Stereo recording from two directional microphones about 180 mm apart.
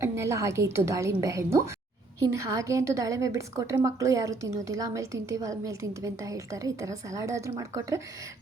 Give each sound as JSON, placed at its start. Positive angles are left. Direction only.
{"t": 0.0, "sound": "a woman's voice", "side_deg": -15}